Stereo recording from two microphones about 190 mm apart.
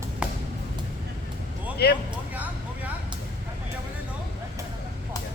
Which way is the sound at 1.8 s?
60° left (ahead or behind).